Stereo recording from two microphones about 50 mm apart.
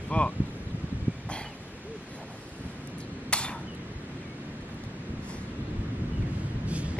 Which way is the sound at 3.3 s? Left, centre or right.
Left.